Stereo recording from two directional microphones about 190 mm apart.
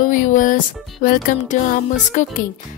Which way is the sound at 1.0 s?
45° left (ahead or behind).